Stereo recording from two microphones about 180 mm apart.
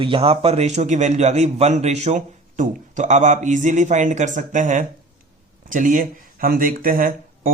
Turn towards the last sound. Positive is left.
turn(degrees=-50)  # may be behind; listen again after turning